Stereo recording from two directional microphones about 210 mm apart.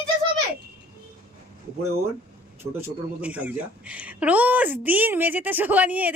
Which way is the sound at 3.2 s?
5° right (ahead or behind).